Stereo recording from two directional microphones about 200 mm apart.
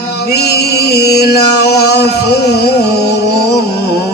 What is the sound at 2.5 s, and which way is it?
Music, 55° left (ahead or behind).